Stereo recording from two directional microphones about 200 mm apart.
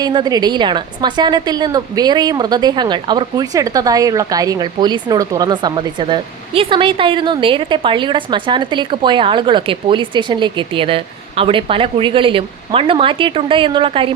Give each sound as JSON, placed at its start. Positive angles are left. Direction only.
{"t": 0.0, "sound": "a woman's voice", "side_deg": -20}